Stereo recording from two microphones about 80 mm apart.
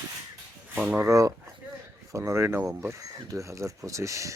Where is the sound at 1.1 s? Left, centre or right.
Right.